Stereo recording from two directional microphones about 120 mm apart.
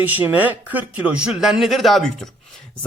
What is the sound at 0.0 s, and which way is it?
Speech, 15° right (ahead or behind).